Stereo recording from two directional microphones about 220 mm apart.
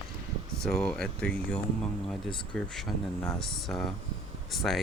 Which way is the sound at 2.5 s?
5° left (ahead or behind).